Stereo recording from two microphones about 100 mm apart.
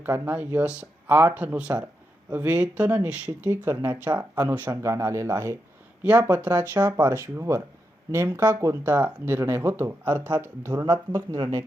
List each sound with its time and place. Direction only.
0.0 s speech: 20° right (ahead or behind)
6.0 s speech: 15° right (ahead or behind)